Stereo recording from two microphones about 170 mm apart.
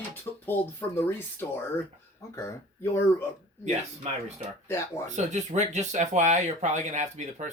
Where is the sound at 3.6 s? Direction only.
40° right (ahead or behind).